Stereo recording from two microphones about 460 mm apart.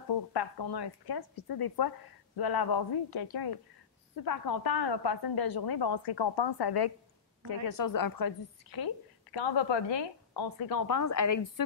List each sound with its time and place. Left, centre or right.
0.1 s a woman's voice: left
8.7 s a woman's voice: left